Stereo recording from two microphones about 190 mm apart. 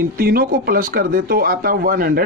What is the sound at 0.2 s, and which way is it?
Speech, 50° right (ahead or behind).